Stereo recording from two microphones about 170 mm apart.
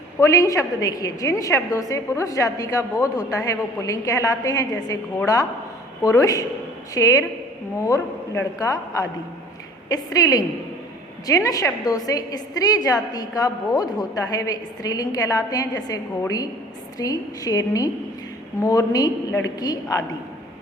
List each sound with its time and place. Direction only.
0.2 s a woman's voice: 20° left (ahead or behind)